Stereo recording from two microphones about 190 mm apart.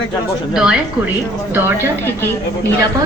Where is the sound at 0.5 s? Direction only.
5° right (ahead or behind).